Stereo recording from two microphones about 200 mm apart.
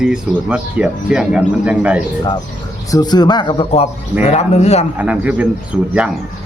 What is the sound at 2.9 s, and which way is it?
Speech, 20° left (ahead or behind).